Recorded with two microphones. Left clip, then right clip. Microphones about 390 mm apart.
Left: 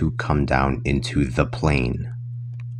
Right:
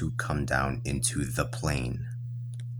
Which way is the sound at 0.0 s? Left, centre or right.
Right.